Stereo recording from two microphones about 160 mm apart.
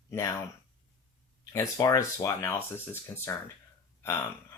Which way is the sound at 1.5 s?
20° left (ahead or behind).